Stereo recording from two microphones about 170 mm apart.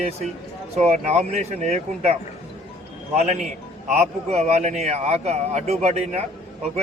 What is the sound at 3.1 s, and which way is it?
Speech, 40° right (ahead or behind).